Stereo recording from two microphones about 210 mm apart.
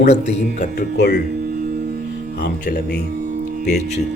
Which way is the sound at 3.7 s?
35° left (ahead or behind).